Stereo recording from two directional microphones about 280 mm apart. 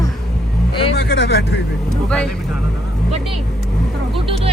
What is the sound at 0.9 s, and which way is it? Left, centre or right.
Speech, left.